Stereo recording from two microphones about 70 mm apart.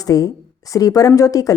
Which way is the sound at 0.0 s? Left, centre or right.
Left.